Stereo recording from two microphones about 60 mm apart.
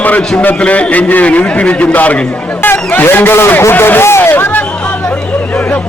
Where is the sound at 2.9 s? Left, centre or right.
Left.